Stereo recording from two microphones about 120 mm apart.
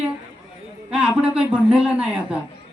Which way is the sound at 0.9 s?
10° right (ahead or behind).